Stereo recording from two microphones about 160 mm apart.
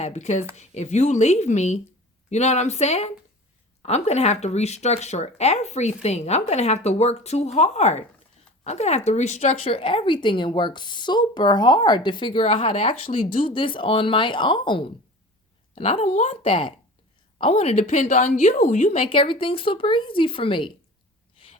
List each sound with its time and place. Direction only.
0.0 s speech: 45° left (ahead or behind)
12.7 s speech: 50° left (ahead or behind)
16.5 s speech: 30° left (ahead or behind)